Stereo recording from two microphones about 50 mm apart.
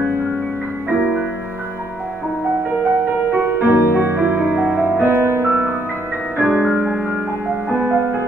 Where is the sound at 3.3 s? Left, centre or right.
Right.